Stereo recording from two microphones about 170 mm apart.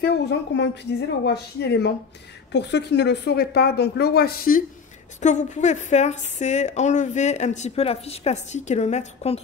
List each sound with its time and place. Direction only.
0.0 s a woman's voice: 80° left
2.5 s a woman's voice: 90° left; by 4.6 s 60° left (ahead or behind)
5.2 s a woman's voice: 45° left (ahead or behind)